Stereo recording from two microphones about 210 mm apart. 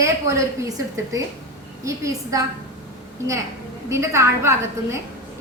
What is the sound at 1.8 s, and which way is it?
Speech, 15° right (ahead or behind).